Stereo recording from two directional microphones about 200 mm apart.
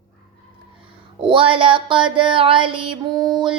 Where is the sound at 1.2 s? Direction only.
25° right (ahead or behind).